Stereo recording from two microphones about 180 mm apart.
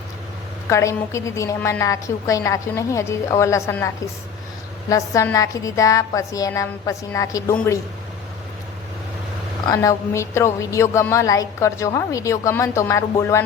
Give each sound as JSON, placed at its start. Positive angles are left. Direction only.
{"t": 0.7, "sound": "a woman's voice", "side_deg": 15}
{"t": 9.6, "sound": "a woman's voice", "side_deg": 15}